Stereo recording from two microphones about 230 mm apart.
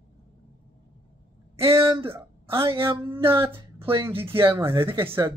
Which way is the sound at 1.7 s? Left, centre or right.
Centre.